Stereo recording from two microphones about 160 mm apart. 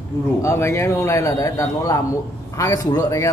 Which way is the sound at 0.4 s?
15° left (ahead or behind).